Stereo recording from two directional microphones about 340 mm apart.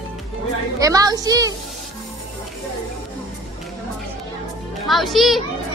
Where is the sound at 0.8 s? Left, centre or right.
Centre.